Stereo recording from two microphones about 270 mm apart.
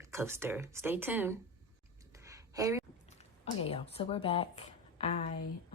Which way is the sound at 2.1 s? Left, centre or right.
Centre.